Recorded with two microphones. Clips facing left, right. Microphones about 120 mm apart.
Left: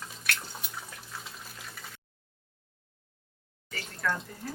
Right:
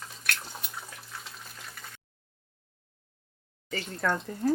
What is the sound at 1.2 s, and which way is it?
Water, centre (ahead or behind).